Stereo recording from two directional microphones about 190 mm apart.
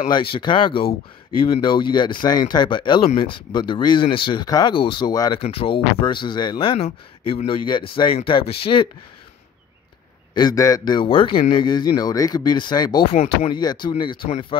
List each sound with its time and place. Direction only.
0.1 s speech: 25° left (ahead or behind)
10.3 s speech: 20° left (ahead or behind)
13.1 s speech: 35° left (ahead or behind)